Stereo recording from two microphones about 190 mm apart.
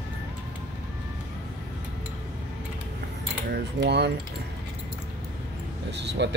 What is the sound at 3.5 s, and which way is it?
Speech, 60° right (ahead or behind).